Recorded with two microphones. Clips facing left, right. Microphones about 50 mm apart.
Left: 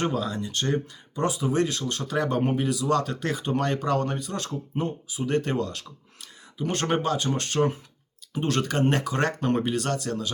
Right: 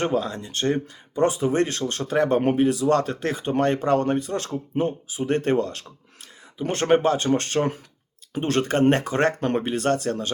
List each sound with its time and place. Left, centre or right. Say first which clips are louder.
0.0 s speech: right 3 dB; right